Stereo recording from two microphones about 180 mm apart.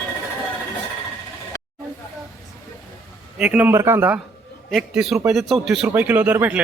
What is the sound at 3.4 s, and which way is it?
A man's voice, 10° right (ahead or behind).